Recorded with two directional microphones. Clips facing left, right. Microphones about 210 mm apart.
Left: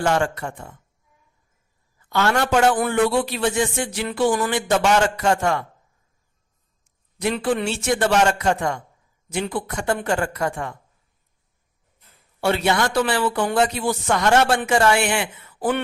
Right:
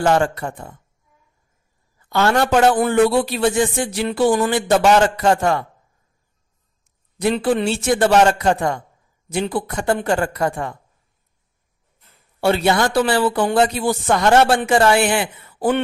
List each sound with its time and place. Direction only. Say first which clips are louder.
0.0 s a man's voice: right 4 dB; 35° right (ahead or behind)
2.0 s a man's voice: right 3 dB; 35° right (ahead or behind)
6.8 s a man's voice: right 4 dB; 35° right (ahead or behind)
12.4 s a man's voice: right 3 dB; 35° right (ahead or behind)